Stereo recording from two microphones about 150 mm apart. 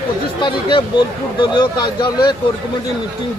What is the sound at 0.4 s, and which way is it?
Speech, 35° left (ahead or behind).